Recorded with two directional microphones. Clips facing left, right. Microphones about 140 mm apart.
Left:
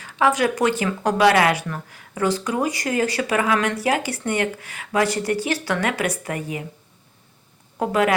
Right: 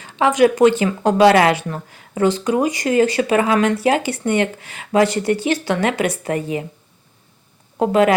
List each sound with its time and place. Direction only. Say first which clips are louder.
0.0 s speech: right 5 dB; 20° right (ahead or behind)
7.8 s speech: right 5 dB; 25° right (ahead or behind)